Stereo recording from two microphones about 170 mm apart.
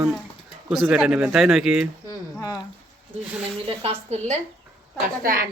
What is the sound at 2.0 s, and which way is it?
Speech, 25° left (ahead or behind).